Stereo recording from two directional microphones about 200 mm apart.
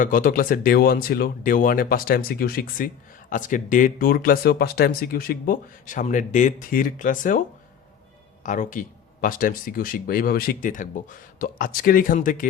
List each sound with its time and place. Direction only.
0.0 s speech: 45° left (ahead or behind)
8.4 s speech: 40° left (ahead or behind)